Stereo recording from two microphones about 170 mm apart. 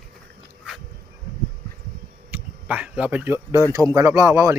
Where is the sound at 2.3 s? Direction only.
10° right (ahead or behind).